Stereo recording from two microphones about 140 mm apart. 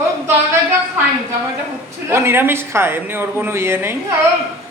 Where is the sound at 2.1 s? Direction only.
20° right (ahead or behind).